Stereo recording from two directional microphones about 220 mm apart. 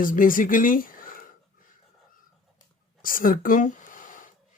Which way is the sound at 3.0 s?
40° left (ahead or behind).